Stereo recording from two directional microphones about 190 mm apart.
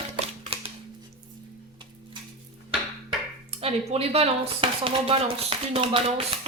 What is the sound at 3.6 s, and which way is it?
Speech, 30° right (ahead or behind).